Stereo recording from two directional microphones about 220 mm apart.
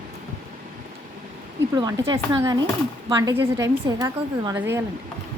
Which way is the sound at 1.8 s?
15° right (ahead or behind).